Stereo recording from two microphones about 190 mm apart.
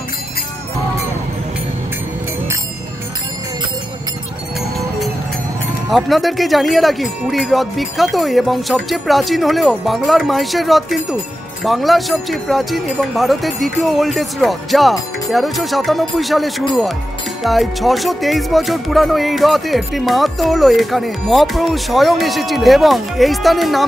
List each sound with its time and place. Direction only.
5.9 s music: centre (ahead or behind)